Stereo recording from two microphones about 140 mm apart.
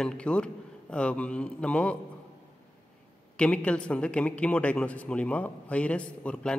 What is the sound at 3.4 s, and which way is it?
A man's voice, 10° left (ahead or behind).